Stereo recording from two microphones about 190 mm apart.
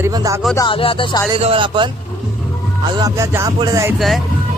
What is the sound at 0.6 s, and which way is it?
Music, 25° left (ahead or behind).